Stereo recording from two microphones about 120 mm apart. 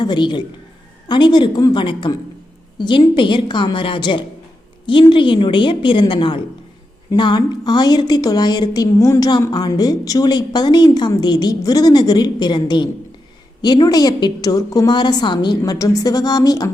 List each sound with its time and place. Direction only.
0.0 s a woman's voice: 40° left (ahead or behind)